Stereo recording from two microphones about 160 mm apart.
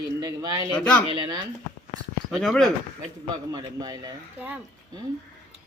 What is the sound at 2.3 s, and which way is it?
Speech, 5° left (ahead or behind).